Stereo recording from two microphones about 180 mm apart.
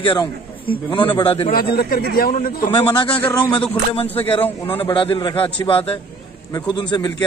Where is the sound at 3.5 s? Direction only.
30° left (ahead or behind).